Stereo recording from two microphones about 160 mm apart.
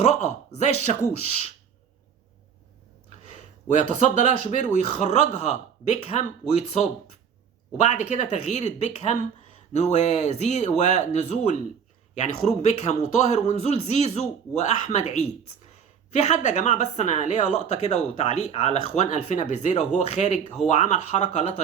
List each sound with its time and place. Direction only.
0.0 s speech: 45° left (ahead or behind)
3.3 s speech: 45° left (ahead or behind)
7.8 s speech: 45° left (ahead or behind)